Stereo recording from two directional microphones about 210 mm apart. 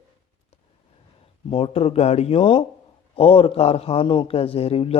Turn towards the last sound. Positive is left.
turn(degrees=30)  # may be behind; listen again after turning